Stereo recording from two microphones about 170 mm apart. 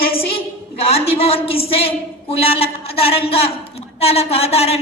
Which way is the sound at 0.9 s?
35° left (ahead or behind).